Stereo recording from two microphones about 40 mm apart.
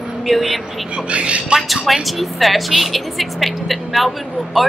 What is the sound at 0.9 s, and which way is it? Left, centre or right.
Speech, right.